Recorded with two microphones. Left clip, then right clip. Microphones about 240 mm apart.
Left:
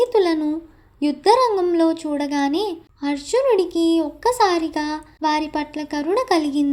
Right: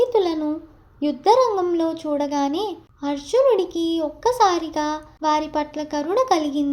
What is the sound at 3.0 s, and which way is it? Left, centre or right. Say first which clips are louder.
Speech: left 1 dB; left.